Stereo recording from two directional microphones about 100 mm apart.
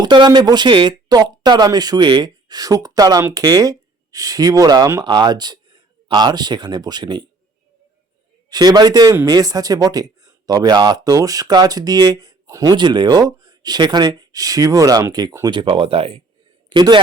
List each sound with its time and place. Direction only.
0.0 s speech: 45° right (ahead or behind)
8.4 s speech: 40° right (ahead or behind)
15.4 s speech: 55° right (ahead or behind)
16.6 s a man's voice: 50° right (ahead or behind)